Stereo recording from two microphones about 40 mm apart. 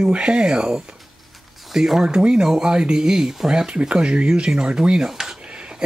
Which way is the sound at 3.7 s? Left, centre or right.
Right.